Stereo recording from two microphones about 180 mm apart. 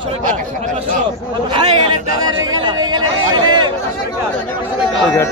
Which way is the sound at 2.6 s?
25° right (ahead or behind).